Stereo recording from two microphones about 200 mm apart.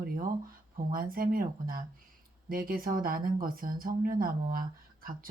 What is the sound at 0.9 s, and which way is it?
Speech, 45° right (ahead or behind).